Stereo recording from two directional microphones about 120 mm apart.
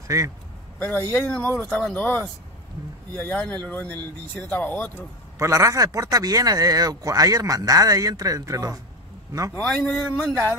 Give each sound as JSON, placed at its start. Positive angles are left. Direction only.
{"t": 0.1, "sound": "speech", "side_deg": -30}
{"t": 0.7, "sound": "speech", "side_deg": 15}
{"t": 3.3, "sound": "speech", "side_deg": 10}
{"t": 5.4, "sound": "speech", "side_deg": -25}
{"t": 9.6, "sound": "speech", "side_deg": 5}